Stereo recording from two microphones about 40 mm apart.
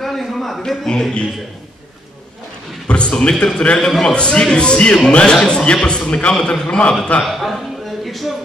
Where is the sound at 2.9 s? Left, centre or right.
Left.